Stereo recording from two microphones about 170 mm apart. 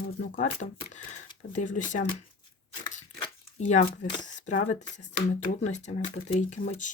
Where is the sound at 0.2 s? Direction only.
50° left (ahead or behind).